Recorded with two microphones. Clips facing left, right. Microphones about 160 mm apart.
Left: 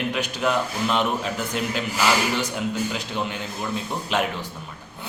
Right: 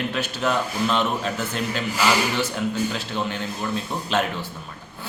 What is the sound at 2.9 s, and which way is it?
A man's voice, 15° left (ahead or behind).